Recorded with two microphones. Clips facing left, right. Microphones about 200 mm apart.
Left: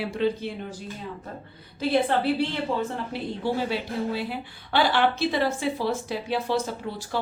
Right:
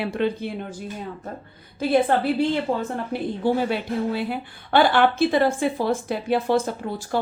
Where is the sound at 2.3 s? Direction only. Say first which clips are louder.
Right 4 dB; 50° right (ahead or behind).